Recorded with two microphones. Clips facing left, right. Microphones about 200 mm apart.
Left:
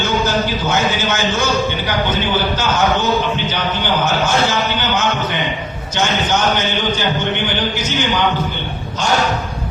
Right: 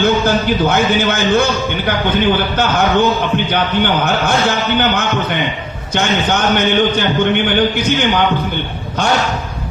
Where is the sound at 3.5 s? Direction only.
55° right (ahead or behind).